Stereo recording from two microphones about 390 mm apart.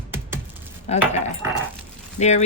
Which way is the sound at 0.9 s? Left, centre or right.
Centre.